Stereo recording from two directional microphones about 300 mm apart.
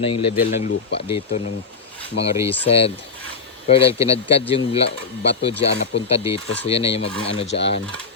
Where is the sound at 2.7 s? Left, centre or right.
Centre.